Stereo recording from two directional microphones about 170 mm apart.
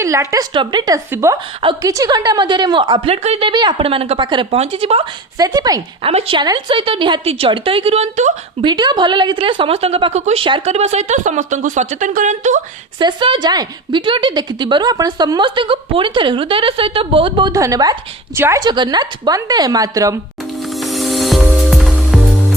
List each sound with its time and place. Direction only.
0.0 s a woman's voice: 15° right (ahead or behind); by 3.5 s 35° right (ahead or behind)
3.5 s a woman's voice: 25° right (ahead or behind)
5.4 s a woman's voice: 20° right (ahead or behind)
6.0 s a woman's voice: 35° right (ahead or behind)
8.6 s a woman's voice: 25° right (ahead or behind); by 12.6 s 45° right (ahead or behind)
13.0 s a woman's voice: 25° right (ahead or behind)
20.7 s music: centre (ahead or behind)